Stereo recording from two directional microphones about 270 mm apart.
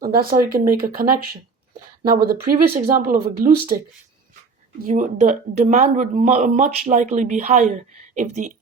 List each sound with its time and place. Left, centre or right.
0.0 s speech: right
4.8 s speech: right